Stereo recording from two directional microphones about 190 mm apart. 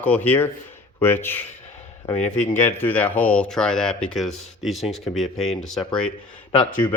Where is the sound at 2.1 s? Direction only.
35° left (ahead or behind).